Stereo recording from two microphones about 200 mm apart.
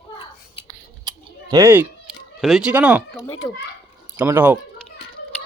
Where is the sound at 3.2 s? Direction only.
20° left (ahead or behind).